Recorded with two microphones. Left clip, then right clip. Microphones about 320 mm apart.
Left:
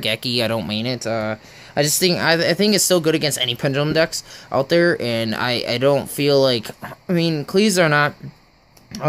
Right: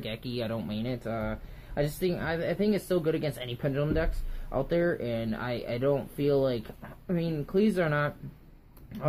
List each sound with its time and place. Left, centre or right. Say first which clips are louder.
0.0 s speech: left 15 dB; left